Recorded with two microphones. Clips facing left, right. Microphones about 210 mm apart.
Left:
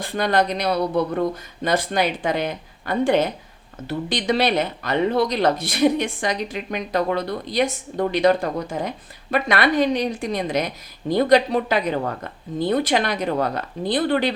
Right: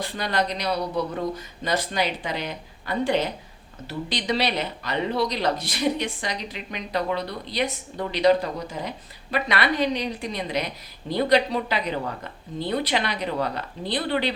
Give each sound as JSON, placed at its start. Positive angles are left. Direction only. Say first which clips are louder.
{"t": 0.0, "sound": "speech", "louder": "left 6 dB", "side_deg": 50}